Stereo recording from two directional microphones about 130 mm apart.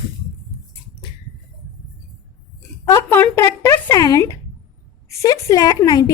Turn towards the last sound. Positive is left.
turn(degrees=30)  # may be behind; listen again after turning